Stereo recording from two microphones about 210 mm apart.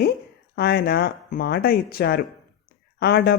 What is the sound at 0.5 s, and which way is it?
Speech, 50° left (ahead or behind).